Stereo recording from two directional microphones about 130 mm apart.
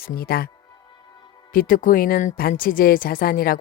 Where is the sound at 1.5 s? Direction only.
90° left.